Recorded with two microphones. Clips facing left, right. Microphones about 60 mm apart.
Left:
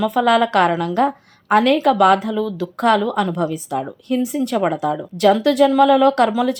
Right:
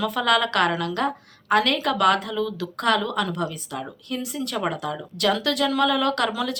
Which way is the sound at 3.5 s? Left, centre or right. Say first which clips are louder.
Left 9 dB; centre.